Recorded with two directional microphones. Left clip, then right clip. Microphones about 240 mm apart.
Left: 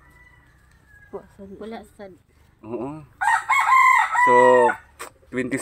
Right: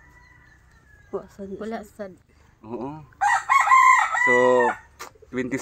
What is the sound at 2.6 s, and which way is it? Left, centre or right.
Speech, centre.